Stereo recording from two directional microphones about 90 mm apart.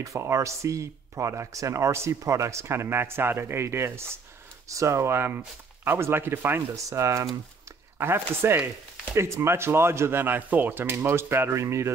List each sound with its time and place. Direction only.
0.0 s speech: 35° right (ahead or behind)
6.7 s speech: 35° right (ahead or behind)